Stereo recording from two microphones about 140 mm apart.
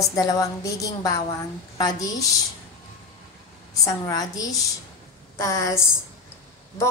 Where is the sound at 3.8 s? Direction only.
25° left (ahead or behind).